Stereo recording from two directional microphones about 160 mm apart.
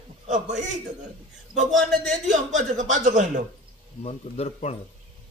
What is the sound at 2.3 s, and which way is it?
Speech, 50° right (ahead or behind).